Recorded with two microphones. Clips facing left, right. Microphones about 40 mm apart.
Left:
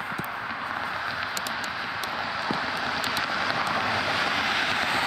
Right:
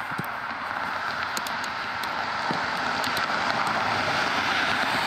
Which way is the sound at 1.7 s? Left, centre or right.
Centre.